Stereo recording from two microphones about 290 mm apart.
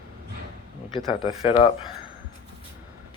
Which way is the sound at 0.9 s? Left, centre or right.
Centre.